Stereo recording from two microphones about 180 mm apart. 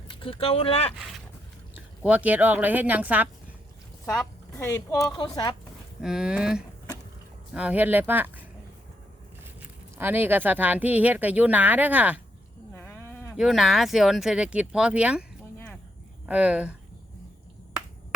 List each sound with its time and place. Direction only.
0.2 s speech: 30° left (ahead or behind)
2.0 s speech: 10° right (ahead or behind)
4.5 s a woman's voice: 15° left (ahead or behind)
6.0 s speech: 5° right (ahead or behind)
9.6 s speech: 10° right (ahead or behind)
12.7 s sheep: 10° left (ahead or behind)
13.3 s speech: centre (ahead or behind)
15.5 s a sound: 10° left (ahead or behind)
16.2 s speech: 5° right (ahead or behind)